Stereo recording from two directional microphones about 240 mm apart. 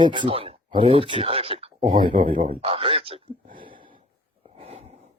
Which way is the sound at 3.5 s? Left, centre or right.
Right.